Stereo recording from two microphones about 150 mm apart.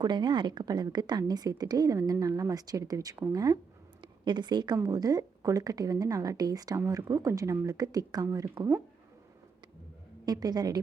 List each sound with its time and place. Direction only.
0.0 s a woman's voice: 30° right (ahead or behind)
10.2 s a woman's voice: 25° right (ahead or behind)